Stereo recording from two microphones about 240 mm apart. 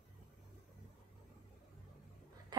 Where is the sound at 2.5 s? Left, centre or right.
Centre.